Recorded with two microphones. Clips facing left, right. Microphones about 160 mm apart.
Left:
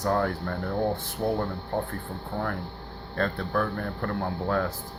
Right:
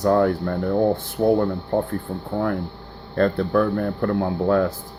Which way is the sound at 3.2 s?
35° right (ahead or behind).